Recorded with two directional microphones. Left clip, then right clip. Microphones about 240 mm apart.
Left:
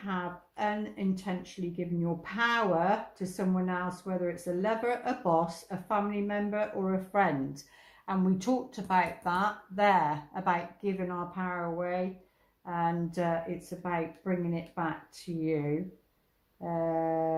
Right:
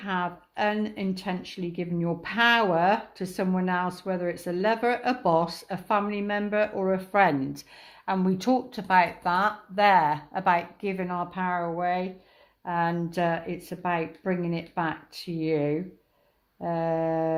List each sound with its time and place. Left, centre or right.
0.0 s speech: right